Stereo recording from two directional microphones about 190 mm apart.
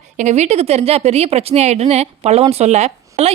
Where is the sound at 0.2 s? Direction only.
35° right (ahead or behind).